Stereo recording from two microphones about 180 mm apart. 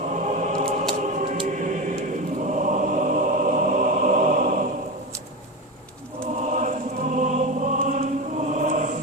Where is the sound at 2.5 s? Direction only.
45° right (ahead or behind).